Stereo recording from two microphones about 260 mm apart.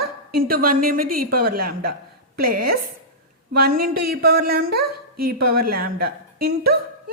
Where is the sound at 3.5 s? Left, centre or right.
Right.